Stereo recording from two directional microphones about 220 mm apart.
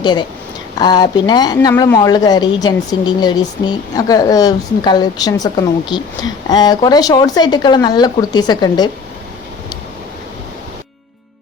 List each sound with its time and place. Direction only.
0.0 s speech: 20° left (ahead or behind)